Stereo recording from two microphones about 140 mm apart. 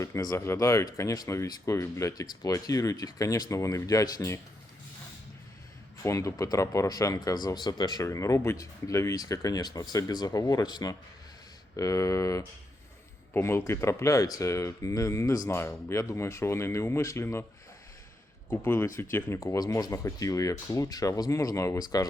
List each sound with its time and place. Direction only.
0.0 s speech: 25° left (ahead or behind)
6.0 s speech: 20° left (ahead or behind)
18.4 s speech: 15° left (ahead or behind)